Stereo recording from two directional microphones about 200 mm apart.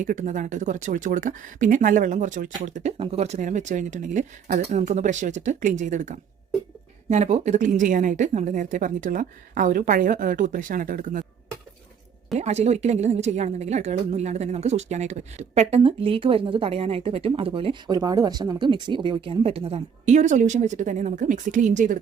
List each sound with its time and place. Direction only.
0.0 s a woman's voice: 40° right (ahead or behind)
12.4 s a woman's voice: 35° right (ahead or behind)